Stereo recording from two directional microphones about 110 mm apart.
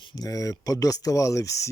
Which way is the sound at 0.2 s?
30° left (ahead or behind).